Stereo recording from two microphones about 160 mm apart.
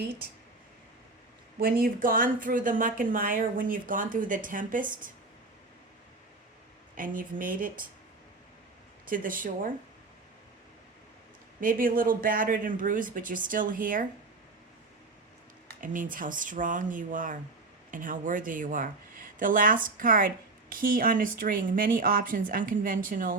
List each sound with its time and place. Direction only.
1.5 s speech: 70° right (ahead or behind)
6.9 s speech: 60° right (ahead or behind)
9.0 s speech: 60° right (ahead or behind)
11.6 s speech: 60° right (ahead or behind)
15.8 s speech: 55° right (ahead or behind)